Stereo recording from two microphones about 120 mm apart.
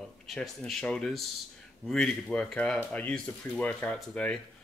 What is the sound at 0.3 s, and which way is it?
Speech, 5° left (ahead or behind).